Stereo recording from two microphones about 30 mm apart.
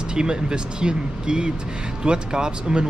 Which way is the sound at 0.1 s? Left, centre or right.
Right.